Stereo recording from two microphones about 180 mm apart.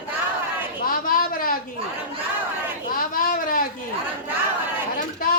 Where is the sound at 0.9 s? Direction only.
50° left (ahead or behind).